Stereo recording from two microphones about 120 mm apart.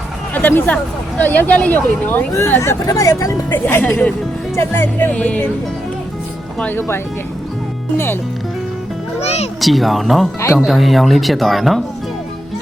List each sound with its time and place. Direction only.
0.3 s speech: 15° left (ahead or behind)
6.6 s speech: 15° left (ahead or behind)
9.2 s music: 60° left (ahead or behind)
9.6 s speech: centre (ahead or behind)